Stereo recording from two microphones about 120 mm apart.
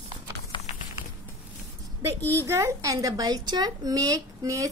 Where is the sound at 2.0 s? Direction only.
25° right (ahead or behind).